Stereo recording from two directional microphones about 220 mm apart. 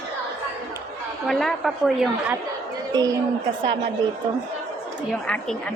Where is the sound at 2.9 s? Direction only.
20° right (ahead or behind).